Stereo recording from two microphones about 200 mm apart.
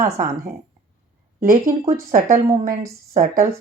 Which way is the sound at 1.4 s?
40° right (ahead or behind).